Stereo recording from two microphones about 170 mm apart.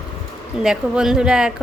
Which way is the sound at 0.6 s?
5° right (ahead or behind).